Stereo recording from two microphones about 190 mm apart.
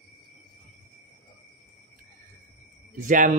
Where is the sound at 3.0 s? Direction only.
45° right (ahead or behind).